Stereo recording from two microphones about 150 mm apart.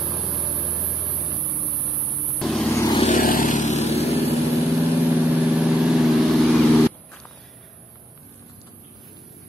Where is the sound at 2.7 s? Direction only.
20° left (ahead or behind).